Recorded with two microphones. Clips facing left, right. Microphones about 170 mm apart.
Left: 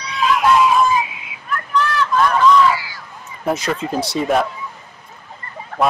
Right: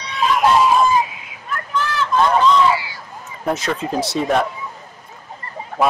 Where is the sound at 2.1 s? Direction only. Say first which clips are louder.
Even; 25° right (ahead or behind).